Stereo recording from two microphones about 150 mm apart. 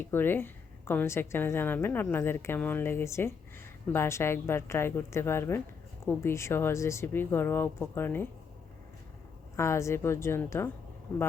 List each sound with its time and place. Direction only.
0.0 s a woman's voice: 15° left (ahead or behind)
9.6 s a woman's voice: 20° left (ahead or behind)